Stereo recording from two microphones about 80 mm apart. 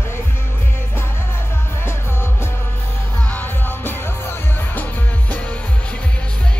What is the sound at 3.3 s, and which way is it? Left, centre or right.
Music, left.